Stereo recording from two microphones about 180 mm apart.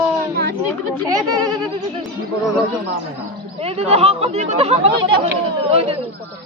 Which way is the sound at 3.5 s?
35° right (ahead or behind).